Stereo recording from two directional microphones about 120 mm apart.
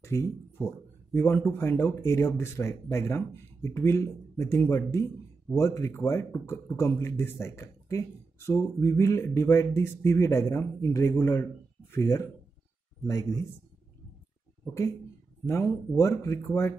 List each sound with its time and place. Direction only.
0.0 s speech: 25° left (ahead or behind)
14.6 s speech: 25° left (ahead or behind)